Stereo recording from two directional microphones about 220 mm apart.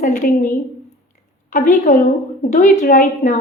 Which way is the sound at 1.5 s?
35° left (ahead or behind).